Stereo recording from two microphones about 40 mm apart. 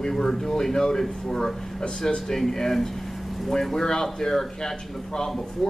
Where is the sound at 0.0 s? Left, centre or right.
Centre.